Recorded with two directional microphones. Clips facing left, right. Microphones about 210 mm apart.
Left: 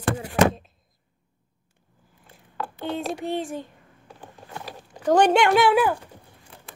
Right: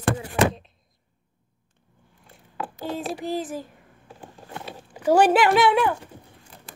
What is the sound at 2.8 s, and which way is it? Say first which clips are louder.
Speech: left 1 dB; centre (ahead or behind).